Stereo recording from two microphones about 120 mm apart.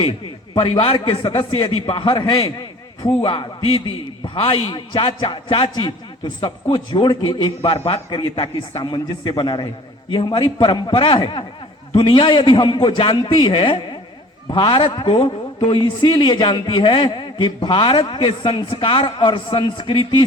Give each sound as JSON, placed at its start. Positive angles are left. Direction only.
{"t": 0.5, "sound": "a man's voice", "side_deg": 45}